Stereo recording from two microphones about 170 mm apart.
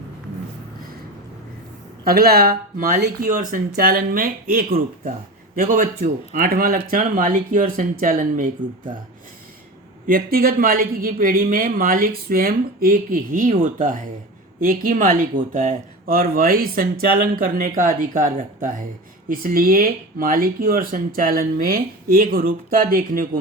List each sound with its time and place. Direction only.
2.0 s speech: 65° right (ahead or behind)
10.1 s speech: 60° right (ahead or behind)